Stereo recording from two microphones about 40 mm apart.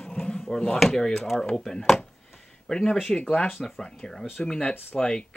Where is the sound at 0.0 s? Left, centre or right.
Centre.